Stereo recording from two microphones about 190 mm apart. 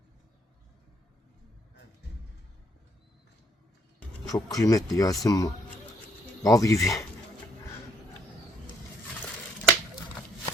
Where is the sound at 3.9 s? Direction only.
20° left (ahead or behind).